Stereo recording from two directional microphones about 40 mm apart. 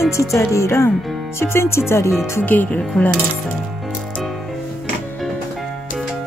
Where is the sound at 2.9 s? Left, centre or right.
Left.